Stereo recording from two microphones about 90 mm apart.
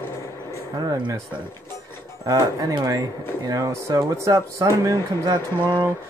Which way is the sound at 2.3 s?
40° right (ahead or behind).